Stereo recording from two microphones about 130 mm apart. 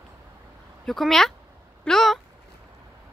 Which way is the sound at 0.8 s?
Centre (ahead or behind).